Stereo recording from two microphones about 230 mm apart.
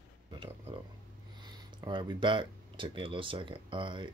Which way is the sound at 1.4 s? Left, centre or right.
Centre.